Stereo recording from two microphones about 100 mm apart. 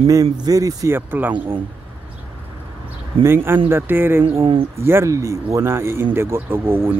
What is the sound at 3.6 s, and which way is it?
Speech, 20° right (ahead or behind).